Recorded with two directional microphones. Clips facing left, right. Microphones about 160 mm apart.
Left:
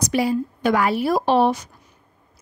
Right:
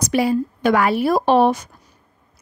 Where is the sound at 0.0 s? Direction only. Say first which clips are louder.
Right 2 dB; 60° right (ahead or behind).